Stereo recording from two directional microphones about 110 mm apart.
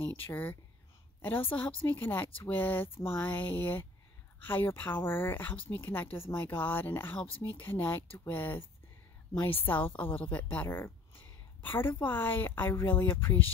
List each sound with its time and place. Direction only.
0.0 s speech: 15° left (ahead or behind)
10.3 s a sound: 15° left (ahead or behind)
12.0 s speech: 20° left (ahead or behind)